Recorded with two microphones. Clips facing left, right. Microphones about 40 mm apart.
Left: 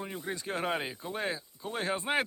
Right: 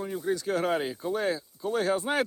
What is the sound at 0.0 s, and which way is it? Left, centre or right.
Speech, left.